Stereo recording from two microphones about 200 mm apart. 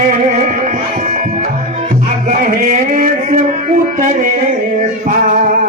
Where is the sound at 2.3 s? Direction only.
40° right (ahead or behind).